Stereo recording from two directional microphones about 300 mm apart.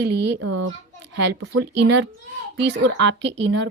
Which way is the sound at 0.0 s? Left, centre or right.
Right.